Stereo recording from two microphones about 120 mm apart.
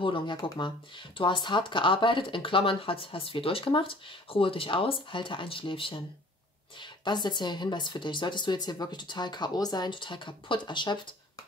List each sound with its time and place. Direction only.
0.0 s speech: 40° left (ahead or behind)